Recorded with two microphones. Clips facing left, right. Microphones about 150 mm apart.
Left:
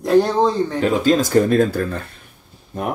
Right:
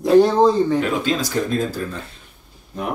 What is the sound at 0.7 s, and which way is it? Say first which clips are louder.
Speech: left 4 dB; 35° left (ahead or behind).